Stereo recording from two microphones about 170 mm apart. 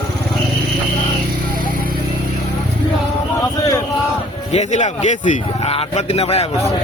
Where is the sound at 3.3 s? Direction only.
20° left (ahead or behind).